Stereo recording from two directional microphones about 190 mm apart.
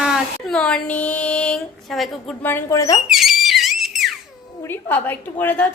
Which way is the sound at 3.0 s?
Centre (ahead or behind).